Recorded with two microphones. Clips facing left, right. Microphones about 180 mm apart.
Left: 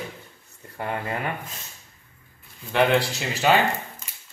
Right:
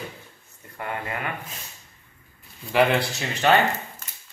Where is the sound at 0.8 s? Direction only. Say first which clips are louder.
Left 2 dB; 30° left (ahead or behind).